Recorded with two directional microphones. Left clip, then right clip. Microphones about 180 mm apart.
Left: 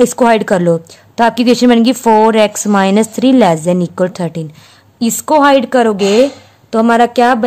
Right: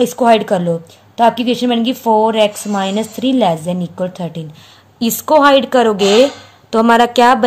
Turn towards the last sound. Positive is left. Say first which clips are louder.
# even
turn(degrees=20)  # may be behind; listen again after turning